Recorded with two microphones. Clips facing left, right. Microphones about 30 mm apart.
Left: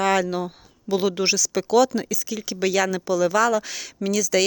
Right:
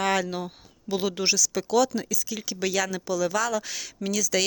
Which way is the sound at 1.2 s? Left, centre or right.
Left.